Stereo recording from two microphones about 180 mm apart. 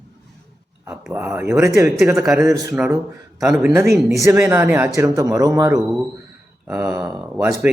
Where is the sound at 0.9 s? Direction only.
10° right (ahead or behind).